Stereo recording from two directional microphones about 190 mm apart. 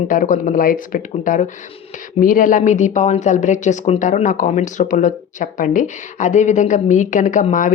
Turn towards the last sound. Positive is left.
turn(degrees=40)  # may be behind; listen again after turning